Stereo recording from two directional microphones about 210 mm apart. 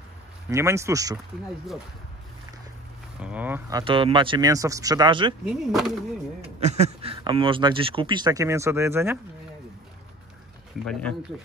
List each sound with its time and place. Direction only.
0.5 s speech: 15° right (ahead or behind)
3.2 s speech: 5° right (ahead or behind)
3.8 s speech: 25° right (ahead or behind)
5.4 s speech: centre (ahead or behind)
6.6 s speech: 30° right (ahead or behind); by 9.2 s 10° right (ahead or behind)
10.9 s speech: 5° left (ahead or behind)